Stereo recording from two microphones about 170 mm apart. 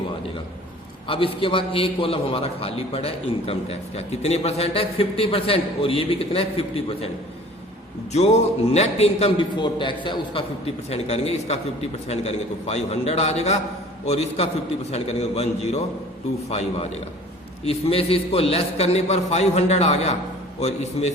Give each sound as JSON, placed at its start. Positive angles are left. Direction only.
{"t": 1.0, "sound": "a man's voice", "side_deg": 30}
{"t": 8.1, "sound": "a man's voice", "side_deg": 40}